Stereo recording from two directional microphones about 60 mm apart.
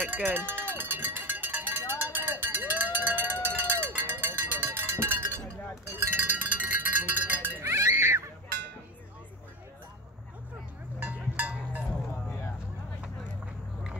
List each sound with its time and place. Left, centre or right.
0.0 s cowbell: right
5.9 s cowbell: right
7.6 s music: right
11.0 s a sound: right